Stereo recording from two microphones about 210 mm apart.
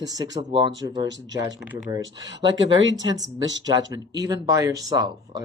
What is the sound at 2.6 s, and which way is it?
Speech, 60° right (ahead or behind).